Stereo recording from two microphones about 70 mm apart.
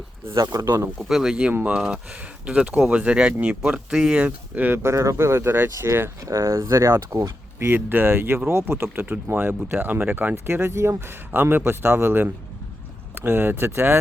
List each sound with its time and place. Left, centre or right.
0.3 s speech: right
1.0 s speech: centre
4.2 s speech: right
4.8 s speech: right
7.6 s speech: right
11.3 s speech: right